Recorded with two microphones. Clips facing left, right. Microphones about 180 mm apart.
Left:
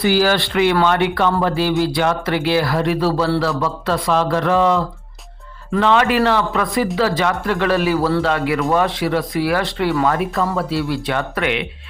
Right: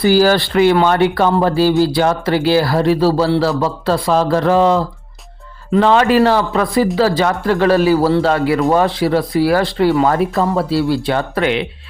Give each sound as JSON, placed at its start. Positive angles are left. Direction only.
{"t": 0.0, "sound": "speech", "side_deg": -40}
{"t": 5.8, "sound": "speech", "side_deg": -35}